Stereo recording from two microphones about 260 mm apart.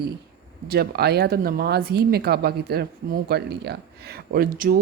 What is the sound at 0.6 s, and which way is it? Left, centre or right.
Speech, right.